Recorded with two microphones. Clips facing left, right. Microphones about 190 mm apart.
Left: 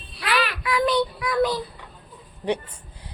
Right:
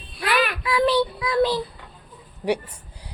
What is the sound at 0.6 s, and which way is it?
Child singing, 30° right (ahead or behind).